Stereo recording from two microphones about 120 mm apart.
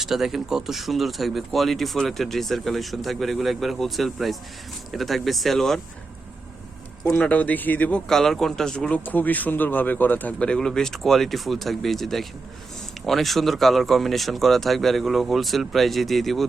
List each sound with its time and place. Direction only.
0.0 s speech: centre (ahead or behind)
7.1 s speech: 10° left (ahead or behind)